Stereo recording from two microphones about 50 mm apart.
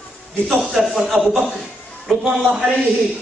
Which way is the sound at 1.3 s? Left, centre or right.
Centre.